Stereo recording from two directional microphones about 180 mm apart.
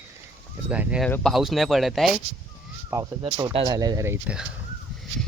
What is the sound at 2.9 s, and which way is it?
Speech, 15° right (ahead or behind).